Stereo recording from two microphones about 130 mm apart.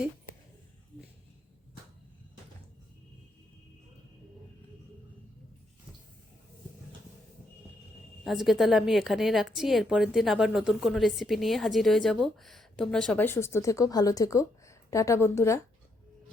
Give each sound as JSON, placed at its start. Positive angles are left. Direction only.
{"t": 8.2, "sound": "a woman's voice", "side_deg": 0}
{"t": 13.1, "sound": "speech", "side_deg": 15}